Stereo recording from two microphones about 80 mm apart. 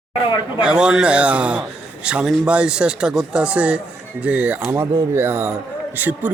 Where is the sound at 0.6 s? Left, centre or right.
Centre.